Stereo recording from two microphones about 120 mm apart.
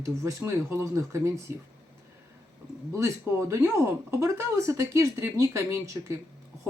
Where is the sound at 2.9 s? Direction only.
25° right (ahead or behind).